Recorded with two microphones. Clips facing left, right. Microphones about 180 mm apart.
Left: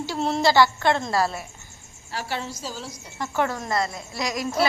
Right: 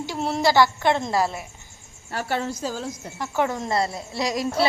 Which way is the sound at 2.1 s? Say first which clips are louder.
Right 4 dB; 50° right (ahead or behind).